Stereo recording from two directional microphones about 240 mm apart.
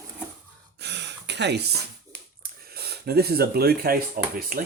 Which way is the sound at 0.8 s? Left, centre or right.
Right.